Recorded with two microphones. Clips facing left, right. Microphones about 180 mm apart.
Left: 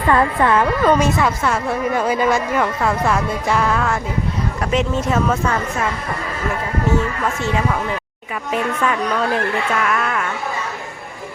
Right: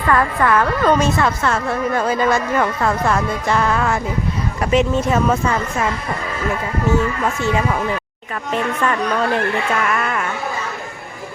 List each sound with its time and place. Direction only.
0.1 s a woman's voice: 25° left (ahead or behind)
0.8 s a woman's voice: 10° left (ahead or behind)
8.5 s speech: 5° left (ahead or behind)